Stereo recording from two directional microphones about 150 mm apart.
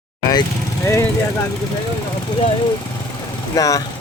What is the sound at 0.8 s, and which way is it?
Speech, 20° left (ahead or behind).